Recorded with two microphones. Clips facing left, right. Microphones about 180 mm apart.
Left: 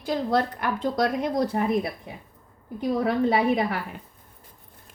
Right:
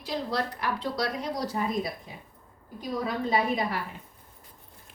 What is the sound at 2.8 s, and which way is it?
Speech, 60° left (ahead or behind).